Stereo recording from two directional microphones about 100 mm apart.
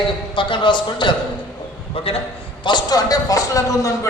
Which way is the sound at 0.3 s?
55° left (ahead or behind).